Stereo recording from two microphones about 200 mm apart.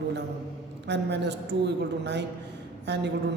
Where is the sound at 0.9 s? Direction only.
60° right (ahead or behind).